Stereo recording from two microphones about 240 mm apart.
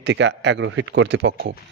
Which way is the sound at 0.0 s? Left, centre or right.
Right.